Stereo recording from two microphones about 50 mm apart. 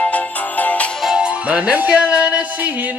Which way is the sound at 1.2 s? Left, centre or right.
Right.